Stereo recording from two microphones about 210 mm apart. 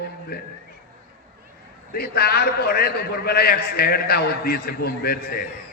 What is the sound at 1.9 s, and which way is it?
A man's voice, 50° left (ahead or behind).